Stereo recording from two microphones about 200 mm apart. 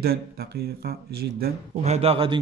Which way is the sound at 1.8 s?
30° right (ahead or behind).